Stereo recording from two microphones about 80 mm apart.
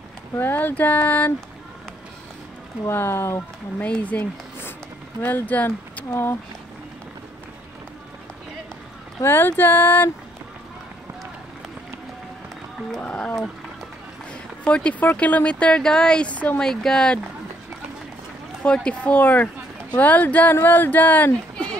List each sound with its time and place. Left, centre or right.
0.4 s speech: left
2.9 s speech: left
3.8 s speech: centre
9.2 s speech: left
13.0 s speech: centre
18.6 s speech: centre